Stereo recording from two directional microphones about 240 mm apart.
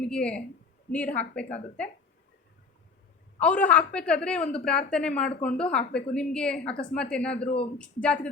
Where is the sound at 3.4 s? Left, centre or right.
Centre.